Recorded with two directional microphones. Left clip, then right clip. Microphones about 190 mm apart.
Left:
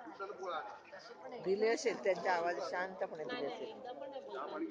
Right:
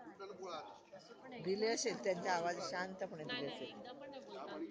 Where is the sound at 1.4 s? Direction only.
10° right (ahead or behind).